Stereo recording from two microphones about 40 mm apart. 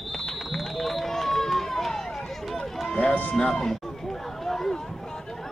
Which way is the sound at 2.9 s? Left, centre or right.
Left.